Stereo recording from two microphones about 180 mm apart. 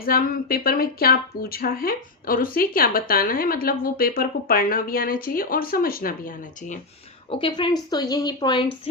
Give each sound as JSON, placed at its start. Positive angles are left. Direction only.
{"t": 0.0, "sound": "speech", "side_deg": 55}
{"t": 7.3, "sound": "speech", "side_deg": 30}